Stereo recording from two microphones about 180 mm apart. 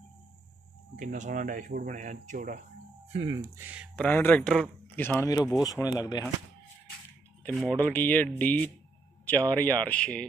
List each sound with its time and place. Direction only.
0.9 s speech: 45° right (ahead or behind)
3.3 s speech: 25° right (ahead or behind)
3.9 s speech: 10° left (ahead or behind)
7.4 s speech: 5° left (ahead or behind)